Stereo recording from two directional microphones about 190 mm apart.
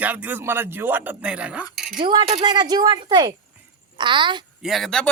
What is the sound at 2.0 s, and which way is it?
Speech, 25° right (ahead or behind).